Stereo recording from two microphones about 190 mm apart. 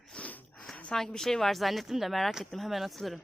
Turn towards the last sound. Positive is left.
turn(degrees=0)  # may be behind; listen again after turning